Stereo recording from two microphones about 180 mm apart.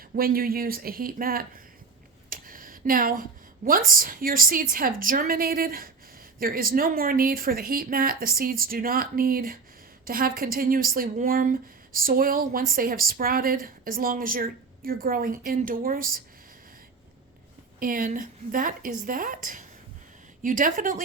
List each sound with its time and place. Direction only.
0.2 s a woman's voice: 55° right (ahead or behind)
17.7 s a woman's voice: 50° right (ahead or behind)